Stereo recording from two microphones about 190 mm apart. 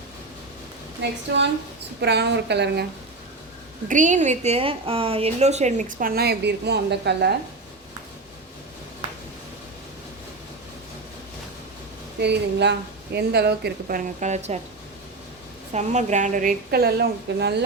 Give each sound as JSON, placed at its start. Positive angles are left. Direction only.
{"t": 1.0, "sound": "a woman's voice", "side_deg": -65}
{"t": 3.8, "sound": "a woman's voice", "side_deg": -40}
{"t": 12.2, "sound": "a woman's voice", "side_deg": -60}
{"t": 15.7, "sound": "a woman's voice", "side_deg": -40}